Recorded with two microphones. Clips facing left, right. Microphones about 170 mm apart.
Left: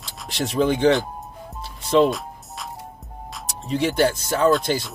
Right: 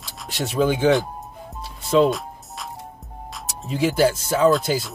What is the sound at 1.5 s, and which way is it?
Music, centre (ahead or behind).